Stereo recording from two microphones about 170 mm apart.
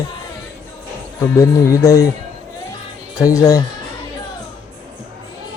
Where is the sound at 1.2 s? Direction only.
15° left (ahead or behind).